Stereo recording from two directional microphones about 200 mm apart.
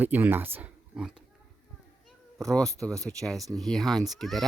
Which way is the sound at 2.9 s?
15° right (ahead or behind).